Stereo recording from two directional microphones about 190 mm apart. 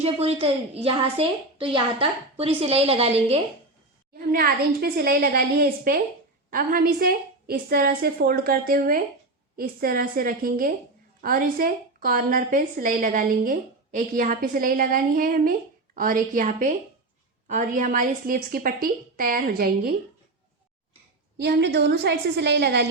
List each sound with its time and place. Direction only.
0.0 s a woman's voice: 30° right (ahead or behind)
4.3 s a woman's voice: 55° right (ahead or behind)
21.3 s a woman's voice: 60° right (ahead or behind)